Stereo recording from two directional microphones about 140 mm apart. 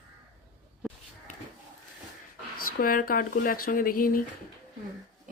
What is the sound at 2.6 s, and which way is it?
Speech, 90° left.